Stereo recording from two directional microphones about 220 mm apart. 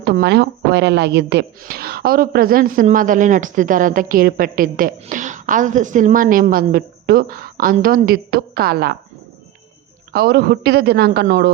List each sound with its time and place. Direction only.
0.0 s speech: 50° right (ahead or behind)
10.1 s a man's voice: 45° right (ahead or behind)